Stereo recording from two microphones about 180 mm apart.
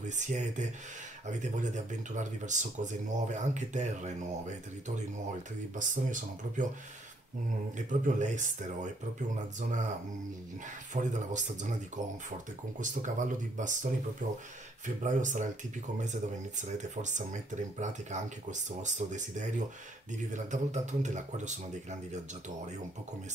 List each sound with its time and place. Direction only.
0.0 s speech: 40° right (ahead or behind)
7.7 s speech: 45° right (ahead or behind)
10.9 s speech: 45° right (ahead or behind)
12.8 s speech: 45° right (ahead or behind)